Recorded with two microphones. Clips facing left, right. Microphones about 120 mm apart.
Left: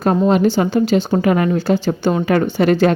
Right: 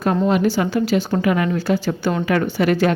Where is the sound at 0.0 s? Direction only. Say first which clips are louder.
Left 3 dB; 30° left (ahead or behind).